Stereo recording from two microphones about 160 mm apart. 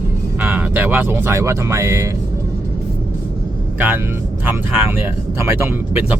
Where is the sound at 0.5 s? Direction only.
10° right (ahead or behind).